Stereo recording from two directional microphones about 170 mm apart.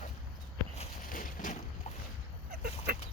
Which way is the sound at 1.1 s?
50° left (ahead or behind).